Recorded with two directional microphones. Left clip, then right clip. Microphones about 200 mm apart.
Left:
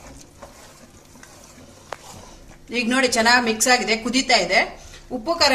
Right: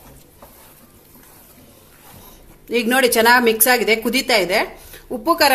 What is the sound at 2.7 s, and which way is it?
A woman's voice, 45° right (ahead or behind).